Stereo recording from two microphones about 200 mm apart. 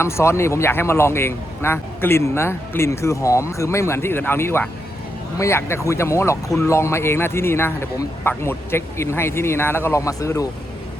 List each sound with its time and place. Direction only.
0.0 s speech: 15° left (ahead or behind)